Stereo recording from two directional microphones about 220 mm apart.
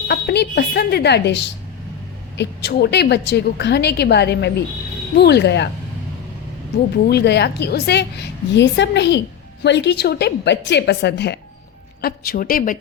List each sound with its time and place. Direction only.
0.1 s a woman's voice: 45° left (ahead or behind)
6.9 s a woman's voice: 45° left (ahead or behind)